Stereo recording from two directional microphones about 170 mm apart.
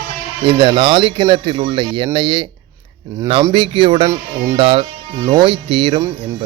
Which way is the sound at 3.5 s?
30° right (ahead or behind).